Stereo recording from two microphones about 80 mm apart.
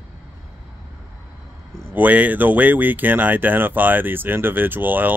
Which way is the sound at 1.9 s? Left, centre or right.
Centre.